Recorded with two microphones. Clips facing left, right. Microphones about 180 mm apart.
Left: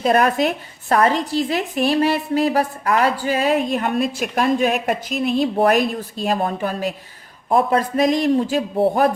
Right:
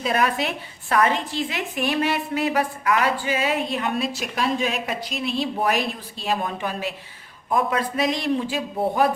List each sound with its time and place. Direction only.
0.0 s a woman's voice: 45° left (ahead or behind)